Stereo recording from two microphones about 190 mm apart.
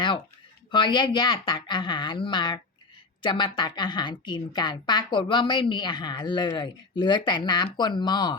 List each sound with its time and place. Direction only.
0.7 s a woman's voice: 25° left (ahead or behind)